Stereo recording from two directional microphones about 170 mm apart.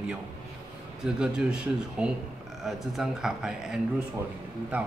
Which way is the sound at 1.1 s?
5° right (ahead or behind).